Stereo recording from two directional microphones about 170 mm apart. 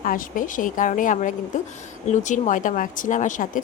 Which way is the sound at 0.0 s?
55° left (ahead or behind).